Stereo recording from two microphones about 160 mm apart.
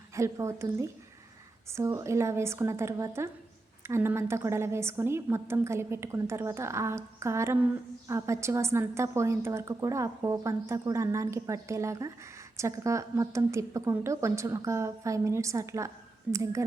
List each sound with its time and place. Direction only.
0.2 s a woman's voice: 20° right (ahead or behind)